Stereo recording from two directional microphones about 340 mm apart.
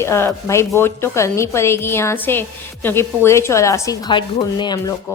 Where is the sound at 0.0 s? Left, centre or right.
Centre.